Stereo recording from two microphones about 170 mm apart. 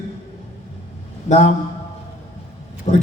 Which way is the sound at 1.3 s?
45° left (ahead or behind).